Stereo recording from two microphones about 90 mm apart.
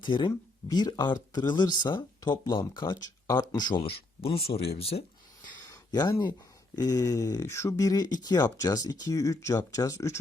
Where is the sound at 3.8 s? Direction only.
90° left.